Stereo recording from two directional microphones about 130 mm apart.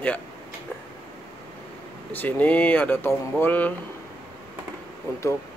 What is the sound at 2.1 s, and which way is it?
Speech, 15° left (ahead or behind).